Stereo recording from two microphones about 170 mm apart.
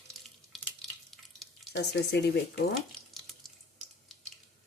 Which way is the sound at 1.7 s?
75° left (ahead or behind).